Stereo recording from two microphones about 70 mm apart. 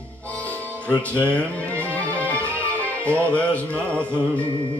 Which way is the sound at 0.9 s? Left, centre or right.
Centre.